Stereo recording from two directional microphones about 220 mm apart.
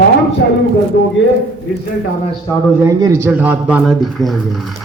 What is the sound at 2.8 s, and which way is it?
A man's voice, 15° right (ahead or behind).